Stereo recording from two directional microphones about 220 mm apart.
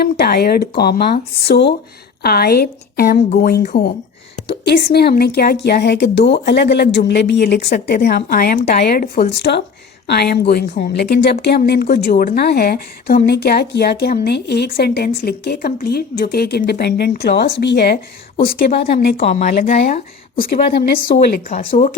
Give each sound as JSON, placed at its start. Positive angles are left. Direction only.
{"t": 0.0, "sound": "a woman's voice", "side_deg": 45}
{"t": 21.7, "sound": "a woman's voice", "side_deg": 30}